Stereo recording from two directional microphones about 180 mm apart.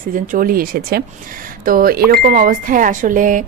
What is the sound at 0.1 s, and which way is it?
Speech, 50° right (ahead or behind).